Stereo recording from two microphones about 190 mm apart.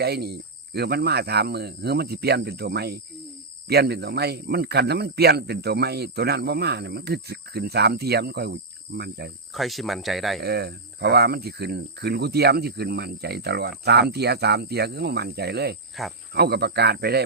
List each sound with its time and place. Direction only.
0.0 s speech: 60° right (ahead or behind)
9.5 s speech: centre (ahead or behind)
10.4 s speech: 60° right (ahead or behind)